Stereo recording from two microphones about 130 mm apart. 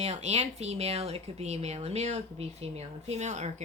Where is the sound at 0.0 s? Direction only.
55° right (ahead or behind).